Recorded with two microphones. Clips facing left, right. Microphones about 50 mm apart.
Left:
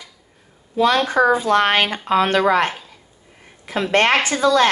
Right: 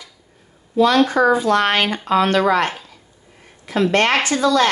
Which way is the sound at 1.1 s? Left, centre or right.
Left.